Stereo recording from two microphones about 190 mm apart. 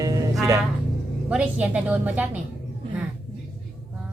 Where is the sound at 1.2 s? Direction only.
5° right (ahead or behind).